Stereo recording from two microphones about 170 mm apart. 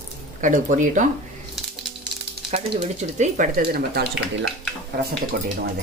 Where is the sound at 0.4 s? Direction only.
50° right (ahead or behind).